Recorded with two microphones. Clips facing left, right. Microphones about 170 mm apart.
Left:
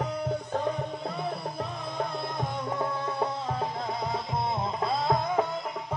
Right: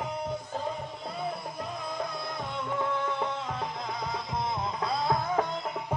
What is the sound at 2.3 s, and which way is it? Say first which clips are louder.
Music: left 1 dB; 35° left (ahead or behind).